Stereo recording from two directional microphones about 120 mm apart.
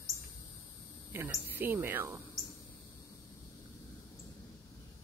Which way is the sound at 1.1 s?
15° right (ahead or behind).